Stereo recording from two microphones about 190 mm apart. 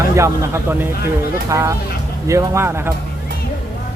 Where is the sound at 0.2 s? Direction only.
10° right (ahead or behind).